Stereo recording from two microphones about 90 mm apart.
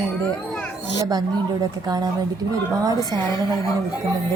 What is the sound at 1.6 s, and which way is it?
Speech, 45° right (ahead or behind).